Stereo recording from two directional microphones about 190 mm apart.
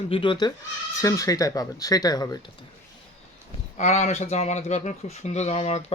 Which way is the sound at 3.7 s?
35° left (ahead or behind).